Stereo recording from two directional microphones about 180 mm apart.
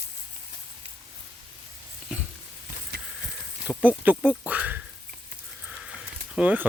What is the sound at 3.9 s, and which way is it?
Speech, 10° right (ahead or behind).